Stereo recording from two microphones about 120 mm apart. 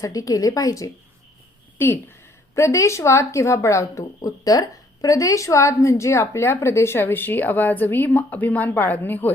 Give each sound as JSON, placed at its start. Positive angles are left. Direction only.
{"t": 0.0, "sound": "speech", "side_deg": 30}